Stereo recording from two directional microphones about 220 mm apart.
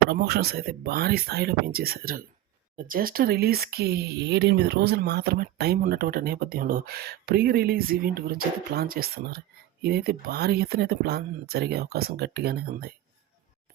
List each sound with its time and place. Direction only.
0.1 s speech: 45° right (ahead or behind)